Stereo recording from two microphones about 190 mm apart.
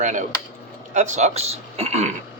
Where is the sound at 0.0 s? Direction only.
40° right (ahead or behind).